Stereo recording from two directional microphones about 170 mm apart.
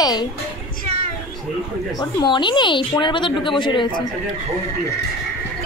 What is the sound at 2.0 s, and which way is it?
Speech, 25° left (ahead or behind).